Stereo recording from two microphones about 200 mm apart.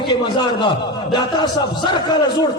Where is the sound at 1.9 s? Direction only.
25° left (ahead or behind).